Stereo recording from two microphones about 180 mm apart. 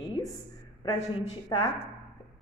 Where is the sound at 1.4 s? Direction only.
20° left (ahead or behind).